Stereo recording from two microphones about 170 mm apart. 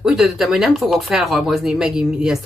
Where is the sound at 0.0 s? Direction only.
Centre (ahead or behind).